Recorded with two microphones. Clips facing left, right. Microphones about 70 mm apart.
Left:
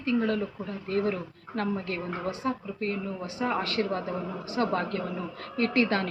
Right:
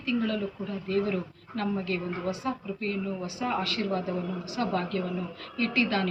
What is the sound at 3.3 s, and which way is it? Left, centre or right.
A woman's voice, left.